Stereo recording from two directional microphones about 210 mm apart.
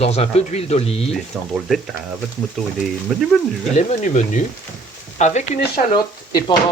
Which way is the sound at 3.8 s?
35° left (ahead or behind).